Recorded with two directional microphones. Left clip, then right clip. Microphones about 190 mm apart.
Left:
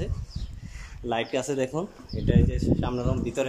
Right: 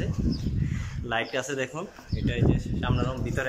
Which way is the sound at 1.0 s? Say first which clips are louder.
Left 1 dB; 20° left (ahead or behind).